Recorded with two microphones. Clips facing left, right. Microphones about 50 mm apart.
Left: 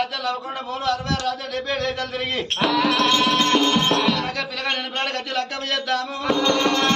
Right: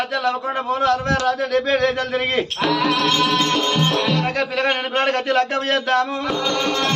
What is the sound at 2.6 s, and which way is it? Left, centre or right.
Music, centre.